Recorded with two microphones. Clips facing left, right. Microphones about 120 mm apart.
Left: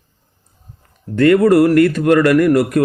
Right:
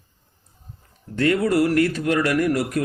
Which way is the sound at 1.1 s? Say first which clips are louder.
Left 9 dB; 60° left (ahead or behind).